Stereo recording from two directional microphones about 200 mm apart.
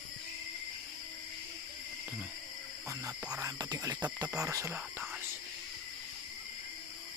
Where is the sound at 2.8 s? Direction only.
10° right (ahead or behind).